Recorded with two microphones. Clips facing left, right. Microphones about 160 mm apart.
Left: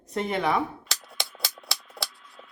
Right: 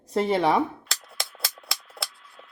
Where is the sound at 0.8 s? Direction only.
Centre (ahead or behind).